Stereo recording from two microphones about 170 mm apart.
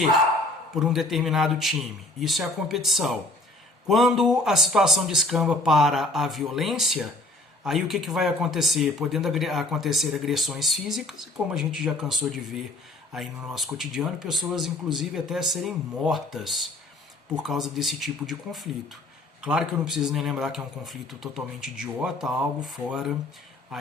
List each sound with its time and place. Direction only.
0.7 s speech: centre (ahead or behind)